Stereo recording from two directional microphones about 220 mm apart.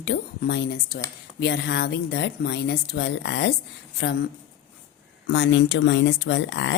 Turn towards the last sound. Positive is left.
turn(degrees=55)  # may be behind; listen again after turning